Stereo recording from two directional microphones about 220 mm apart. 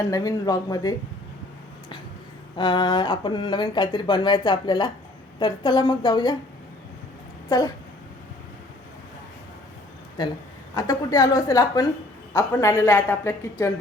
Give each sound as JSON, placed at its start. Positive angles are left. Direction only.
{"t": 0.0, "sound": "a woman's voice", "side_deg": 15}
{"t": 2.6, "sound": "speech", "side_deg": 20}
{"t": 10.8, "sound": "a woman's voice", "side_deg": 15}